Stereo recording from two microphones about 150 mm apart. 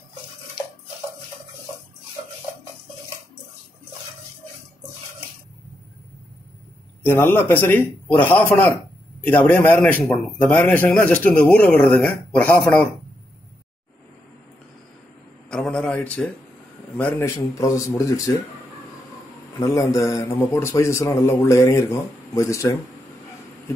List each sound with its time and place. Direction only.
7.0 s a man's voice: 15° left (ahead or behind)
15.5 s a man's voice: 5° left (ahead or behind)
17.2 s a man's voice: 20° left (ahead or behind)
19.6 s a man's voice: 20° left (ahead or behind)